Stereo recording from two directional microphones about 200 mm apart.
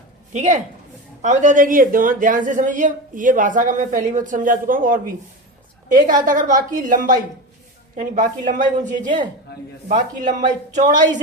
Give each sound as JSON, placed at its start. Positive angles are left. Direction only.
{"t": 0.3, "sound": "speech", "side_deg": -35}